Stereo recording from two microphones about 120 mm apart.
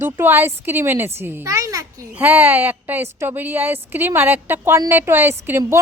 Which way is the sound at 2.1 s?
15° right (ahead or behind).